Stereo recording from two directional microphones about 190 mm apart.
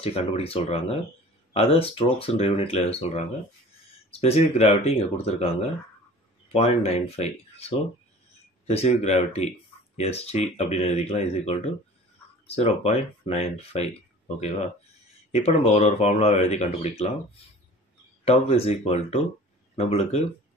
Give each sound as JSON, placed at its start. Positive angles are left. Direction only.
{"t": 0.0, "sound": "speech", "side_deg": 30}
{"t": 8.6, "sound": "speech", "side_deg": 35}
{"t": 18.2, "sound": "speech", "side_deg": 30}